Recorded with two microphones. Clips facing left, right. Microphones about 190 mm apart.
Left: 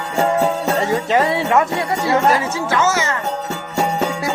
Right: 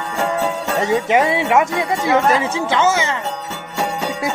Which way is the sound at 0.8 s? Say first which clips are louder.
Right 4 dB; 15° right (ahead or behind).